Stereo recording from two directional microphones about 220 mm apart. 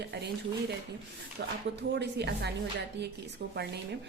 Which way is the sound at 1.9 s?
50° right (ahead or behind).